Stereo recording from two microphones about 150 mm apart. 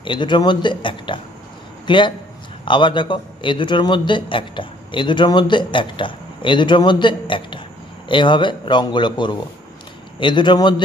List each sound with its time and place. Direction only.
0.0 s a man's voice: 30° left (ahead or behind)